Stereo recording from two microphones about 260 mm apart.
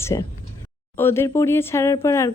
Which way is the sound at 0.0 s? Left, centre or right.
Centre.